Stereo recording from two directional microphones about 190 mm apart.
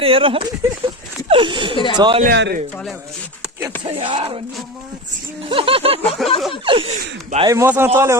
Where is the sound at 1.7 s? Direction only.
25° left (ahead or behind).